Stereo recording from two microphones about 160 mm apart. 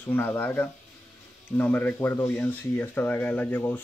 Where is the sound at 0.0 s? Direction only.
10° left (ahead or behind).